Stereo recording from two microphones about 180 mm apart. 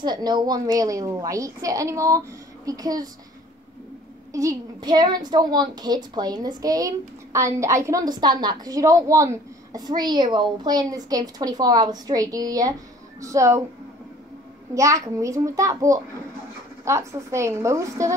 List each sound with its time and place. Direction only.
0.0 s a woman's voice: 25° right (ahead or behind)
4.3 s a woman's voice: 20° right (ahead or behind)
14.7 s a woman's voice: 15° right (ahead or behind)